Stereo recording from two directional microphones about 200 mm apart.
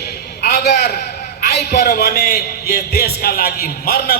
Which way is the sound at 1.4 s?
55° left (ahead or behind).